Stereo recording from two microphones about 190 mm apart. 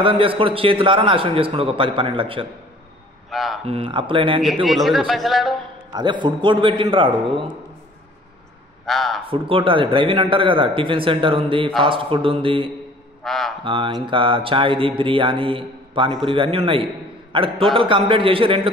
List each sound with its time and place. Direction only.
0.0 s a man's voice: 25° right (ahead or behind)
3.3 s a sound: centre (ahead or behind)
3.6 s a man's voice: 30° right (ahead or behind)
4.6 s speech: centre (ahead or behind)
5.9 s a man's voice: 25° right (ahead or behind)
8.8 s speech: centre (ahead or behind)
9.3 s a man's voice: 30° right (ahead or behind)
13.2 s speech: centre (ahead or behind)
13.7 s a man's voice: 25° right (ahead or behind)